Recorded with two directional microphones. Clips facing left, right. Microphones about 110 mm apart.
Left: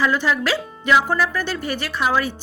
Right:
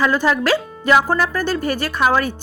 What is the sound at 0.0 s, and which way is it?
A woman's voice, 45° right (ahead or behind).